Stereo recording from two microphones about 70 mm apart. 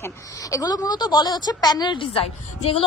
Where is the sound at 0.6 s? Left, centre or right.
Left.